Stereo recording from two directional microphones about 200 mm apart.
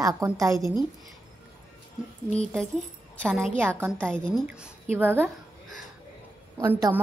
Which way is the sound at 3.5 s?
10° right (ahead or behind).